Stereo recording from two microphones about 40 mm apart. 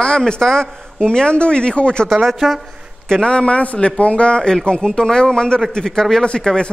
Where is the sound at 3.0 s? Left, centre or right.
Centre.